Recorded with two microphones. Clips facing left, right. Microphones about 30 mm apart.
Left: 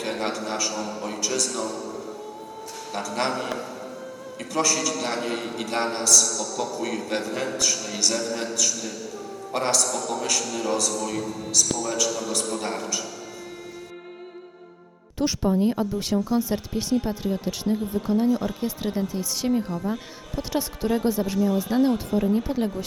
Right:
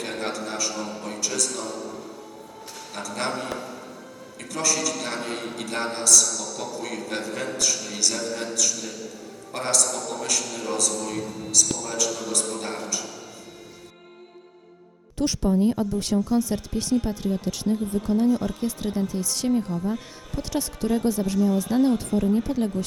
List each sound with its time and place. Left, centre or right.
0.0 s speech: centre
3.3 s a man's voice: centre
5.7 s speech: centre
6.1 s a man's voice: centre
9.5 s speech: centre
15.4 s a woman's voice: centre